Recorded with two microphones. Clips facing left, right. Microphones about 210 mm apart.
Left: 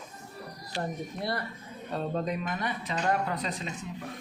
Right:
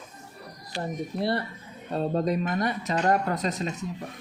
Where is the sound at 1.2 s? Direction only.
30° right (ahead or behind).